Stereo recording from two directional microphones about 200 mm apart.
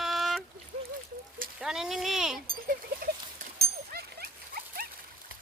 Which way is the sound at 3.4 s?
50° right (ahead or behind).